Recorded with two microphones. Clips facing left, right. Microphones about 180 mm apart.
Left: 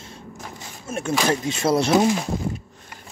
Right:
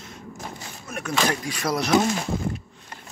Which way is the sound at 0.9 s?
25° left (ahead or behind).